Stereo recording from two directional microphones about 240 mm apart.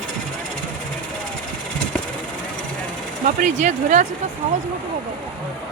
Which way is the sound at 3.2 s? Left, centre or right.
Right.